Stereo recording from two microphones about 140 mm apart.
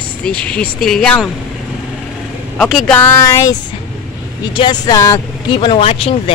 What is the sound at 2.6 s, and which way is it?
Speech, 5° left (ahead or behind).